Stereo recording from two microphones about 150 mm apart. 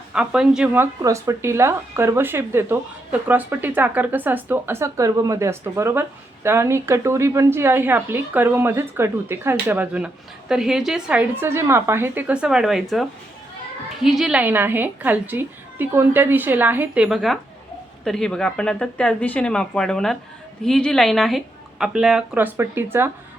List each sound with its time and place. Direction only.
0.1 s speech: 5° right (ahead or behind)